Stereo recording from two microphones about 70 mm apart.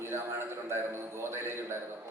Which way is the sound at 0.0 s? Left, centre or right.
Right.